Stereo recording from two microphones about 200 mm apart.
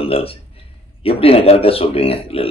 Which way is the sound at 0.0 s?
30° left (ahead or behind).